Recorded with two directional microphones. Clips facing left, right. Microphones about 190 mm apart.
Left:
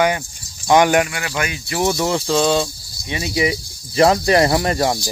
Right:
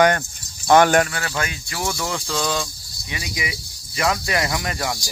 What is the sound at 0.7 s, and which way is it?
Speech, 15° left (ahead or behind).